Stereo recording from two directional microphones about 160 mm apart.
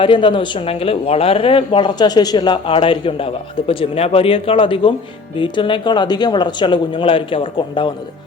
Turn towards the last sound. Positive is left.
turn(degrees=30)  # may be behind; listen again after turning